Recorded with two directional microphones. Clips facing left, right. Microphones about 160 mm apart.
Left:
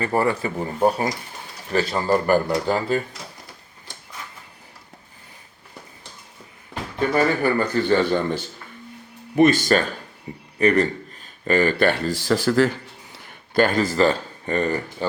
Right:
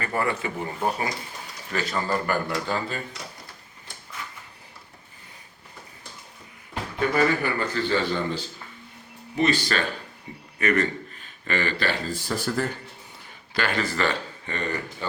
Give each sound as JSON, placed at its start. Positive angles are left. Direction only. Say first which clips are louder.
{"t": 0.0, "sound": "speech", "louder": "left 5 dB", "side_deg": 35}
{"t": 7.4, "sound": "speech", "louder": "left 6 dB", "side_deg": 45}
{"t": 12.0, "sound": "speech", "louder": "left 8 dB", "side_deg": 90}
{"t": 13.5, "sound": "speech", "louder": "left 8 dB", "side_deg": 45}